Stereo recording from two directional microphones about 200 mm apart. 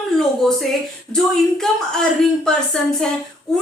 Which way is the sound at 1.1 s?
Centre (ahead or behind).